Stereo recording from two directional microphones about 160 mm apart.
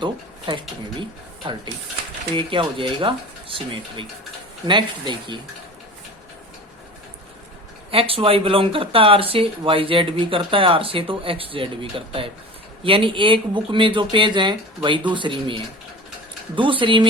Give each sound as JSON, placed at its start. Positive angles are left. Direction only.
{"t": 0.0, "sound": "speech", "side_deg": -30}
{"t": 7.9, "sound": "speech", "side_deg": -35}